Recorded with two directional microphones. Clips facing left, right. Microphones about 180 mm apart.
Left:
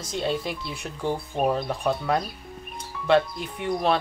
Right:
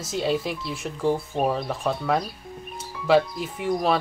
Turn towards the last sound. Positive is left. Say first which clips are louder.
# right 1 dB
turn(degrees=0)  # may be behind; listen again after turning